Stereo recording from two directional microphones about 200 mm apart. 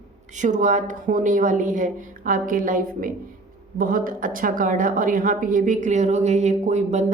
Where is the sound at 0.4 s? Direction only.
35° right (ahead or behind).